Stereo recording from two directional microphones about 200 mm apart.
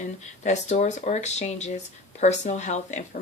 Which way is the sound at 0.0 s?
35° left (ahead or behind).